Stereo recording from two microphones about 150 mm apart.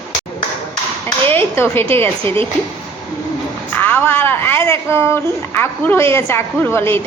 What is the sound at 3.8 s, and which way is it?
Speech, 15° left (ahead or behind).